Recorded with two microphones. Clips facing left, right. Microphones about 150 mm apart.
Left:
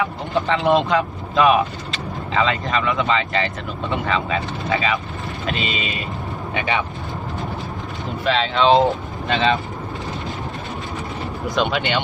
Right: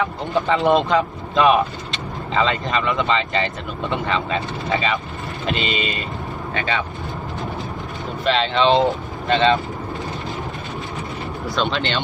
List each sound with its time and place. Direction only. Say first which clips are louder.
0.0 s speech: right 1 dB; centre (ahead or behind)
6.5 s speech: left 1 dB; 15° left (ahead or behind)
8.2 s speech: even; centre (ahead or behind)
11.5 s speech: left 2 dB; 15° left (ahead or behind)